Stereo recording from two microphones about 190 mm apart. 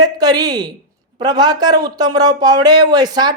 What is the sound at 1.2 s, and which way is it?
Speech, 20° right (ahead or behind).